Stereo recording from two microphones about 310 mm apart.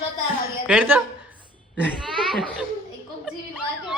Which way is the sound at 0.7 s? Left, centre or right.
Centre.